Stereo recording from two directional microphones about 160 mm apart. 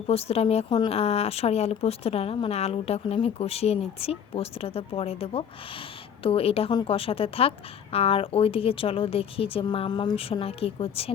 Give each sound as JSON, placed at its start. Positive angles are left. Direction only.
{"t": 0.1, "sound": "speech", "side_deg": 40}